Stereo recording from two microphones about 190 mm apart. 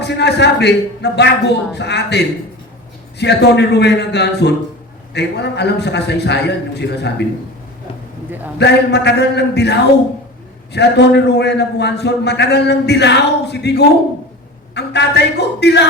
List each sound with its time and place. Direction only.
0.0 s a man's voice: 65° left (ahead or behind)
8.5 s a man's voice: 60° left (ahead or behind)